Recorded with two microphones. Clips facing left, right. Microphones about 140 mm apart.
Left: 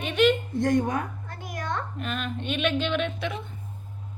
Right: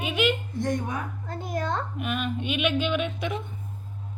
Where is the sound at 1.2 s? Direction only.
30° right (ahead or behind).